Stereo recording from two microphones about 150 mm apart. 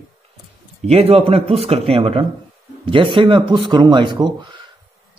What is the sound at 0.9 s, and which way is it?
Speech, 40° right (ahead or behind).